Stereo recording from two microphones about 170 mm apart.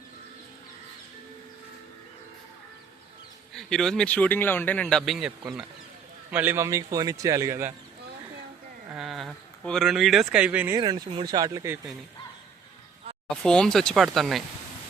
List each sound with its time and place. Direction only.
3.5 s speech: 5° left (ahead or behind)
6.3 s a man's voice: 10° right (ahead or behind)
8.9 s speech: centre (ahead or behind)
10.8 s speech: 25° right (ahead or behind)
13.3 s speech: 5° left (ahead or behind)